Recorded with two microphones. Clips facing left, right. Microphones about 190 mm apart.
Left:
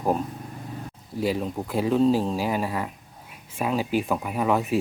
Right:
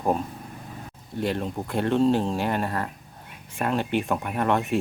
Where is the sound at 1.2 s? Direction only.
5° left (ahead or behind).